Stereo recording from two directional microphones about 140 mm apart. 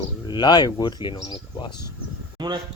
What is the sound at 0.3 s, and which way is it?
Speech, 30° left (ahead or behind).